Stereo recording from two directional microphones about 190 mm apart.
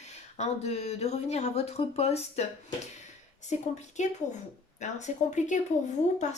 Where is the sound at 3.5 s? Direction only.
40° left (ahead or behind).